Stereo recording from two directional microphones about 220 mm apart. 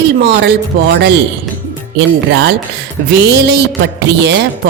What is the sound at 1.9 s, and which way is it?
Music, 50° right (ahead or behind).